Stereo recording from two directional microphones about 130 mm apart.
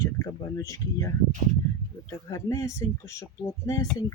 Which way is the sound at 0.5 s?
25° left (ahead or behind).